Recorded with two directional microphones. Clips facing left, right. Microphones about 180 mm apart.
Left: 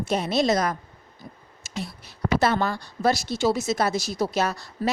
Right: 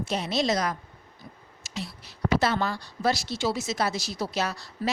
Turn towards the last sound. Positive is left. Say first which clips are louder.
# left 4 dB
turn(degrees=50)  # may be behind; listen again after turning